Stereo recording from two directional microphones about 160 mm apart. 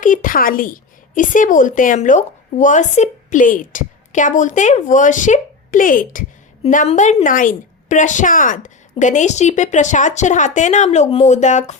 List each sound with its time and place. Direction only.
0.0 s a woman's voice: 55° left (ahead or behind)